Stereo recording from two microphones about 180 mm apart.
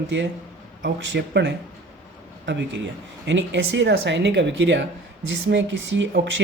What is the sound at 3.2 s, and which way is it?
Speech, 90° right.